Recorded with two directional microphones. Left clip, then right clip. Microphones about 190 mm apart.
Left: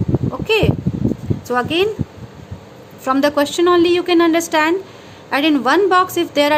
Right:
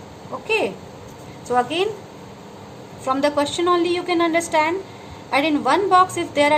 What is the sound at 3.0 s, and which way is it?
A woman's voice, 55° left (ahead or behind).